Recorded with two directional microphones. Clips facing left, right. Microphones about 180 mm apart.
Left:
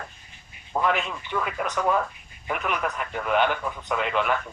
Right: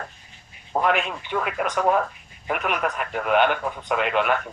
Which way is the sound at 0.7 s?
55° right (ahead or behind).